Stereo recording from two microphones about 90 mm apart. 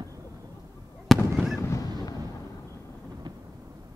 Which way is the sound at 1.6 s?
35° left (ahead or behind).